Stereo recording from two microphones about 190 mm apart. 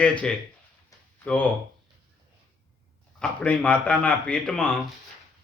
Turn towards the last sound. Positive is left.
turn(degrees=5)  # may be behind; listen again after turning